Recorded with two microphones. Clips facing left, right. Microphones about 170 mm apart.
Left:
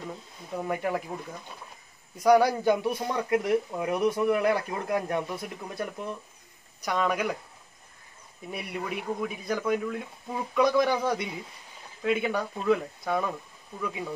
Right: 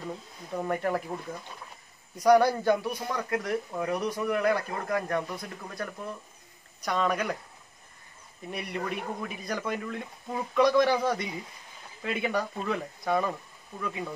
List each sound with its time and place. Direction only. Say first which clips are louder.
0.0 s a man's voice: right 1 dB; 5° left (ahead or behind)
2.1 s a man's voice: even; 5° left (ahead or behind)
2.7 s a man's voice: left 1 dB; 25° left (ahead or behind)
5.2 s a man's voice: left 3 dB; 5° left (ahead or behind)
6.8 s a man's voice: left 1 dB; 5° left (ahead or behind)
8.5 s a man's voice: right 1 dB; 5° left (ahead or behind)